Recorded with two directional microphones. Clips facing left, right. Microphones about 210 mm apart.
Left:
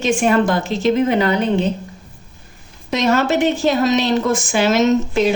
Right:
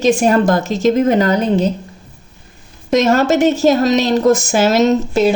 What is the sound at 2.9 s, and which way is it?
A woman's voice, 45° right (ahead or behind).